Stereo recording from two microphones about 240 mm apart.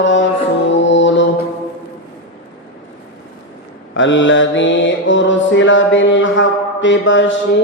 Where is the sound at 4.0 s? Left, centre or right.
Left.